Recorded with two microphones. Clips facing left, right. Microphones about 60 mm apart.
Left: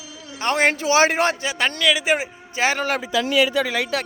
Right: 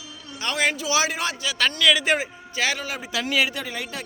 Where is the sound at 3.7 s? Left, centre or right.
Left.